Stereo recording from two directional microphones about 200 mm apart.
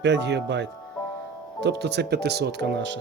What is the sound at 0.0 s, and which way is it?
Speech, 60° right (ahead or behind).